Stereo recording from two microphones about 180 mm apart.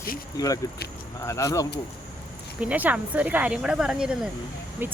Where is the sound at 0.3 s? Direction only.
20° left (ahead or behind).